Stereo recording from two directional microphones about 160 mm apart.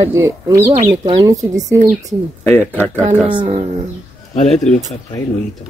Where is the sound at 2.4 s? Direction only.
10° left (ahead or behind).